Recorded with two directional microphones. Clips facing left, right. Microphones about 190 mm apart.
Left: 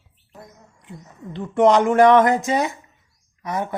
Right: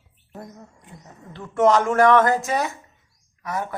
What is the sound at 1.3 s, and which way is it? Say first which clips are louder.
Speech: left 2 dB; 20° left (ahead or behind).